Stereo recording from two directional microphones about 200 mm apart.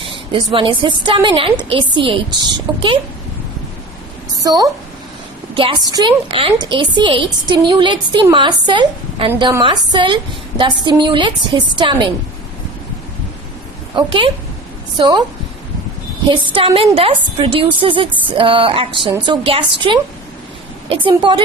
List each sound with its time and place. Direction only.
0.0 s a woman's voice: 25° right (ahead or behind)
4.4 s a woman's voice: 20° right (ahead or behind)
13.9 s a woman's voice: 25° right (ahead or behind)
16.3 s a woman's voice: 25° right (ahead or behind)